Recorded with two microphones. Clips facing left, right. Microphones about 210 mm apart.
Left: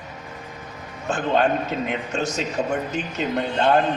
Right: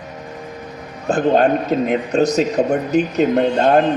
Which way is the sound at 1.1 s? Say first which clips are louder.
Right 6 dB; 40° right (ahead or behind).